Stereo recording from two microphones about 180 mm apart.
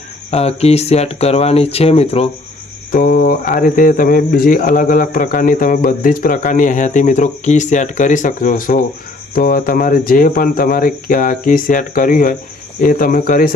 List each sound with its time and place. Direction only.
0.3 s speech: 35° left (ahead or behind)
2.9 s speech: 50° left (ahead or behind)